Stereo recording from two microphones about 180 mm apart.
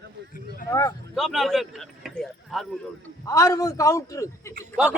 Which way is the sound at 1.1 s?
Centre (ahead or behind).